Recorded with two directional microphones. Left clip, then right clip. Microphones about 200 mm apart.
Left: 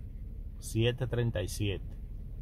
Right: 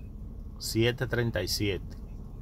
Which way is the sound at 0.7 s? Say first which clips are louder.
Right 4 dB; 20° left (ahead or behind).